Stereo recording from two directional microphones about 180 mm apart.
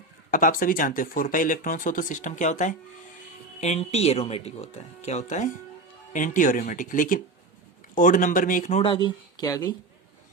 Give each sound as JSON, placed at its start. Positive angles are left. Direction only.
{"t": 0.3, "sound": "speech", "side_deg": 50}